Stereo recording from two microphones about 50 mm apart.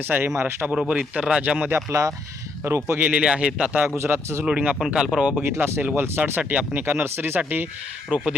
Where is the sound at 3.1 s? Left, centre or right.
Right.